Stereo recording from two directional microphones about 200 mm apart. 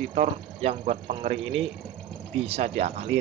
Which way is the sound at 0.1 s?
30° right (ahead or behind).